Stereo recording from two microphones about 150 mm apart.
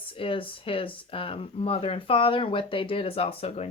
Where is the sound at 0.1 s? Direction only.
35° left (ahead or behind).